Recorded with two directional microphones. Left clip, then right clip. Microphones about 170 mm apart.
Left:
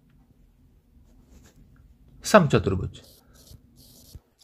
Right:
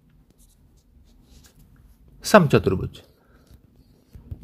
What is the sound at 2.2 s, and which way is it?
Speech, 35° right (ahead or behind).